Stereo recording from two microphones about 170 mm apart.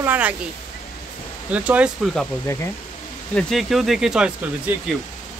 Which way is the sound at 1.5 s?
10° right (ahead or behind).